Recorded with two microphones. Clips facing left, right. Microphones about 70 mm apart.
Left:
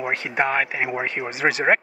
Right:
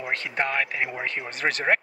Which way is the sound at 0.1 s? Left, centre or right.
Centre.